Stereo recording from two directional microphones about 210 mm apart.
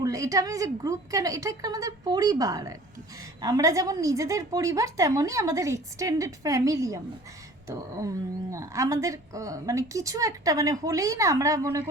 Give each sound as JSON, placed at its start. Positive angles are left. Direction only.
{"t": 0.0, "sound": "speech", "side_deg": -15}